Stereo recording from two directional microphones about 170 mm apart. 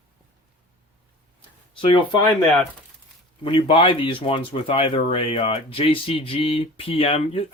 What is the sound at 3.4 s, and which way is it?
Speech, 30° left (ahead or behind).